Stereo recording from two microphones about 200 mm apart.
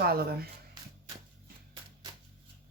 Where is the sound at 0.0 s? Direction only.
50° right (ahead or behind).